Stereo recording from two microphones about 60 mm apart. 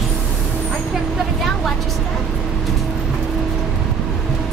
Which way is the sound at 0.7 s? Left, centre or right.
Centre.